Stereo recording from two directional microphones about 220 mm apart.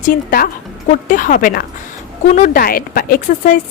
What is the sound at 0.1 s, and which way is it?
A woman's voice, 40° left (ahead or behind).